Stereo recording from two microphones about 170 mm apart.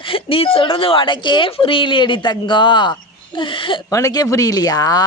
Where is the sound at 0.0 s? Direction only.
30° left (ahead or behind).